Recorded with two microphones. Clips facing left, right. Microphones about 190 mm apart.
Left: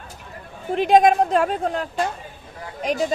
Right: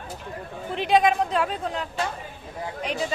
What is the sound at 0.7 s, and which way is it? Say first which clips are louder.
A woman's voice: left 5 dB; 45° left (ahead or behind).